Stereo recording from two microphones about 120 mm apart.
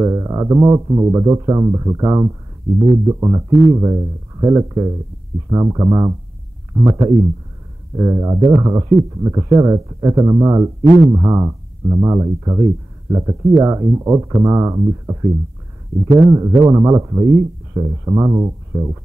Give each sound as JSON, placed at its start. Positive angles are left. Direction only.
{"t": 0.0, "sound": "speech", "side_deg": -25}
{"t": 16.2, "sound": "speech", "side_deg": -25}